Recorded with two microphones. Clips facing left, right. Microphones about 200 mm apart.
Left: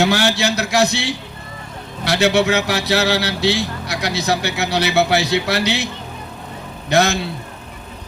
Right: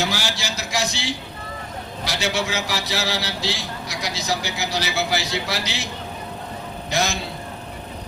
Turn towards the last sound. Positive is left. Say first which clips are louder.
# left 8 dB
turn(degrees=65)  # may be behind; listen again after turning